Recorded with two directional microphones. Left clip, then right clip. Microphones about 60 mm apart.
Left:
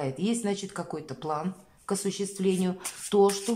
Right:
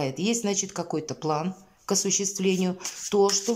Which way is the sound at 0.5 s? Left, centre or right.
Right.